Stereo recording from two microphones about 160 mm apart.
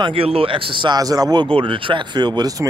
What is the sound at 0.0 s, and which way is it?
Speech, 35° right (ahead or behind).